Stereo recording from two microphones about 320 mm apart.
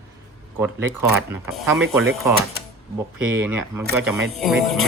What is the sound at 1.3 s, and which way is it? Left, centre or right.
Speech, centre.